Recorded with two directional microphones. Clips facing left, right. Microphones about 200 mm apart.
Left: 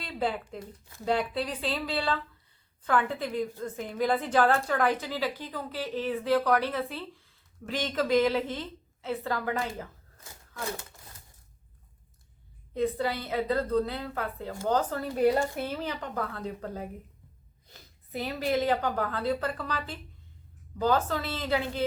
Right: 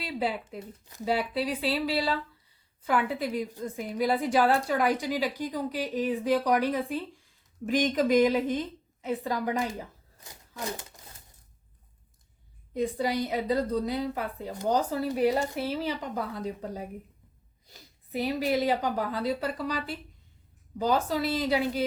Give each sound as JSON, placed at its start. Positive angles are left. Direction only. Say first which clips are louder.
{"t": 0.0, "sound": "a woman's voice", "louder": "right 1 dB", "side_deg": -10}
{"t": 12.7, "sound": "a woman's voice", "louder": "right 1 dB", "side_deg": -15}